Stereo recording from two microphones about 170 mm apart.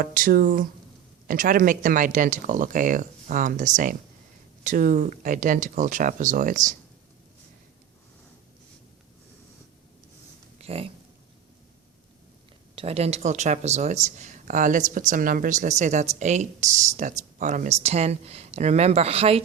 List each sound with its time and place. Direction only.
0.0 s speech: 55° right (ahead or behind)
10.6 s oink: 35° right (ahead or behind)
12.7 s speech: 35° right (ahead or behind)